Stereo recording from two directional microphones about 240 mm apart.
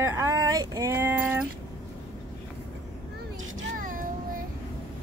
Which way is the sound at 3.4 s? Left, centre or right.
Right.